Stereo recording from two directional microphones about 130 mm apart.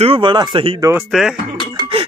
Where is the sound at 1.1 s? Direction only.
Centre (ahead or behind).